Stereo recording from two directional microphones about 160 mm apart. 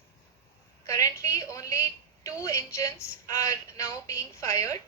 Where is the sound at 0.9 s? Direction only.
20° left (ahead or behind).